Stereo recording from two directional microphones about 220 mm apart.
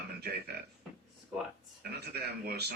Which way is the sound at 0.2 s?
45° right (ahead or behind).